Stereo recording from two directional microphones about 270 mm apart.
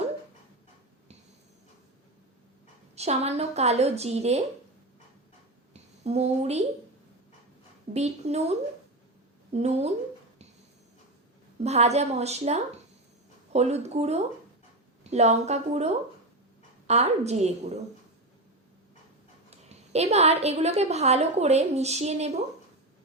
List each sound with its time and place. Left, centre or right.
2.9 s a woman's voice: right
5.7 s speech: right
7.9 s a woman's voice: right
11.6 s a woman's voice: right
19.5 s a woman's voice: right